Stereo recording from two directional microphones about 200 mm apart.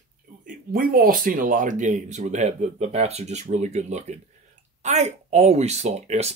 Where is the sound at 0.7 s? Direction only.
45° right (ahead or behind).